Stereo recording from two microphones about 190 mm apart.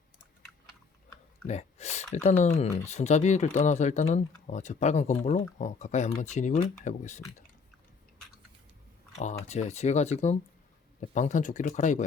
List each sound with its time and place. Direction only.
1.5 s a sound: 35° left (ahead or behind)
2.4 s speech: 40° left (ahead or behind)
9.1 s speech: 35° left (ahead or behind)